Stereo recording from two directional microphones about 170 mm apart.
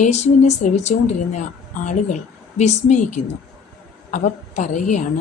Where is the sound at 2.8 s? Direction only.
45° left (ahead or behind).